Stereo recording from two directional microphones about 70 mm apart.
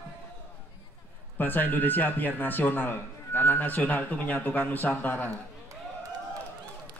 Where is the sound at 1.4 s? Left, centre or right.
Left.